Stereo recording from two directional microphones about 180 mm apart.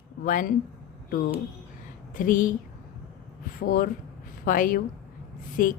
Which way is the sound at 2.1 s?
50° left (ahead or behind).